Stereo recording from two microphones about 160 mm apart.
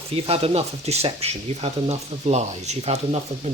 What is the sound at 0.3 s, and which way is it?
Speech, 35° right (ahead or behind).